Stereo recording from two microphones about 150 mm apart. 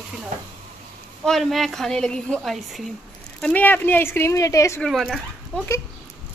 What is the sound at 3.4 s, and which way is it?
Speech, 10° left (ahead or behind).